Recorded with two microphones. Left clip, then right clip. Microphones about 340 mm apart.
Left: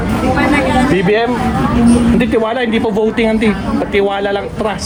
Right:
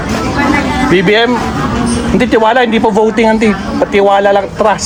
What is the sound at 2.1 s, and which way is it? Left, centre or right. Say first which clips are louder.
Speech: right 6 dB; centre.